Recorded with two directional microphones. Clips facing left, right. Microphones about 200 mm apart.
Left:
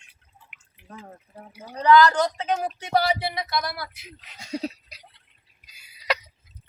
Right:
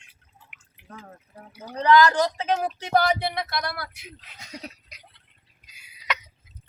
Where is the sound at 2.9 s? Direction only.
55° right (ahead or behind).